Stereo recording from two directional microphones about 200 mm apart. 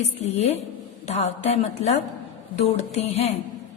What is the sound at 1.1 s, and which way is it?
A woman's voice, 30° left (ahead or behind).